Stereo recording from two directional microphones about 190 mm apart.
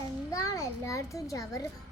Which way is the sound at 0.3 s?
15° left (ahead or behind).